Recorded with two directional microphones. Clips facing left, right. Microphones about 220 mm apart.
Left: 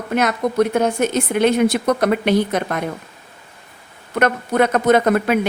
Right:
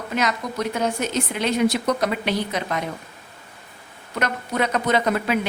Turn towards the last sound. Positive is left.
turn(degrees=50)  # may be behind; listen again after turning